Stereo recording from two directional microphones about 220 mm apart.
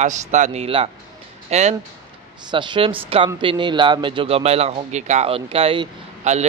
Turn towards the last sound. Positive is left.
turn(degrees=-25)  # may be behind; listen again after turning